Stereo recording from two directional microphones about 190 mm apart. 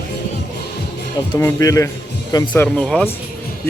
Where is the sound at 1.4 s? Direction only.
15° left (ahead or behind).